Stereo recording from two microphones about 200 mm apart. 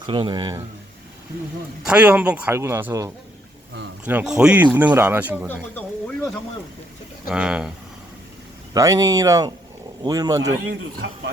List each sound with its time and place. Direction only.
0.0 s speech: 25° right (ahead or behind)
1.9 s speech: 5° right (ahead or behind)
5.7 s speech: 10° left (ahead or behind)
7.3 s speech: 5° right (ahead or behind)
8.7 s speech: 15° right (ahead or behind)